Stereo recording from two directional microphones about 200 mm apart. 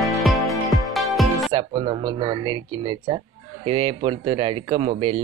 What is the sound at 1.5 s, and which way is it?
Speech, 25° right (ahead or behind).